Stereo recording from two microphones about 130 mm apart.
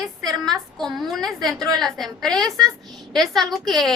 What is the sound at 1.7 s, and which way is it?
A woman's voice, centre (ahead or behind).